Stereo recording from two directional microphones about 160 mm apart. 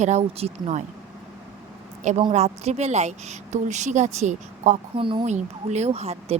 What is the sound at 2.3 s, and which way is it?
A woman's voice, 45° right (ahead or behind).